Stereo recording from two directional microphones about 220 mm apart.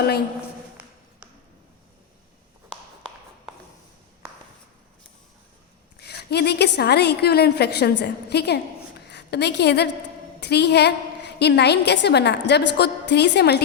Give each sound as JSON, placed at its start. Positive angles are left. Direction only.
{"t": 6.0, "sound": "a woman's voice", "side_deg": 50}